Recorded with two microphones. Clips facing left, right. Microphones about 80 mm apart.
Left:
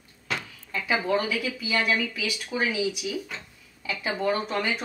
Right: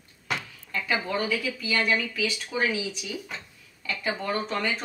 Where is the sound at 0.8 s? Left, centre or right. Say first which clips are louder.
Left 3 dB; centre.